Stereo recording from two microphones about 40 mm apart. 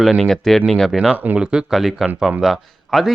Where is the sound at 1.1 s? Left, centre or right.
Right.